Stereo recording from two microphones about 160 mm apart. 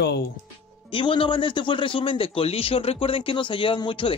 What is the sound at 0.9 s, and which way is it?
A man's voice, 30° left (ahead or behind).